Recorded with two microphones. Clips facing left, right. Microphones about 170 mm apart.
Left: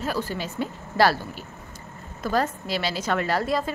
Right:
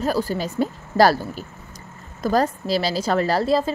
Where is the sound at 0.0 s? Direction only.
40° right (ahead or behind).